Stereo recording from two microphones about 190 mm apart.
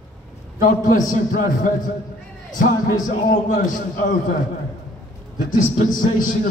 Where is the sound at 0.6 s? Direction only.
45° left (ahead or behind).